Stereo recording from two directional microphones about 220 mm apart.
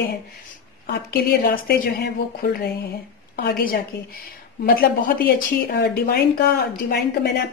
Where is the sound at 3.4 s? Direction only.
45° left (ahead or behind).